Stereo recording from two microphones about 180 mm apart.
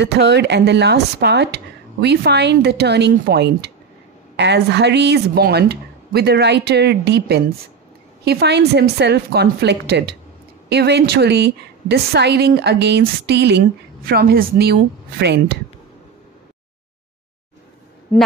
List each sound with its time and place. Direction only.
0.0 s a woman's voice: 70° right (ahead or behind)